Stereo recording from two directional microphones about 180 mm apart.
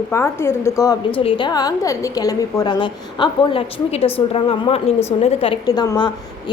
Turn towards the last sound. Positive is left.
turn(degrees=25)  # may be behind; listen again after turning